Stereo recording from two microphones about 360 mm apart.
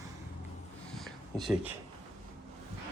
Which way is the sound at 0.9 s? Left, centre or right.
Centre.